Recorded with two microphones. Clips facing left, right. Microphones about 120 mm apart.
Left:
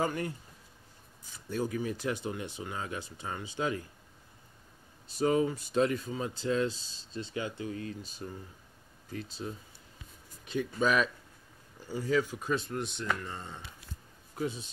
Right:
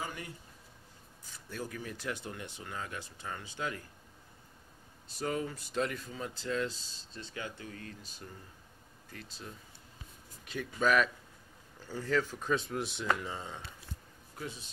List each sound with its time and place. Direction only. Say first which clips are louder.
0.0 s speech: left 10 dB; 50° left (ahead or behind)
1.5 s speech: left 8 dB; 20° left (ahead or behind)
5.2 s speech: left 8 dB; 15° left (ahead or behind)
10.4 s speech: left 2 dB; 25° left (ahead or behind)
11.9 s speech: left 3 dB; 10° left (ahead or behind)